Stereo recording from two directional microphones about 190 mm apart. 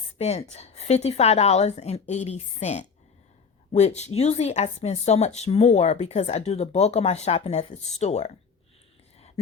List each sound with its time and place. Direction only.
0.2 s a woman's voice: 35° left (ahead or behind)